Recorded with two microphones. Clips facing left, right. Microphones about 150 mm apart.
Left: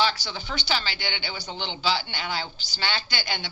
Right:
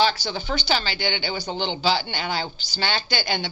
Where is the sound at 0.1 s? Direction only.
40° right (ahead or behind).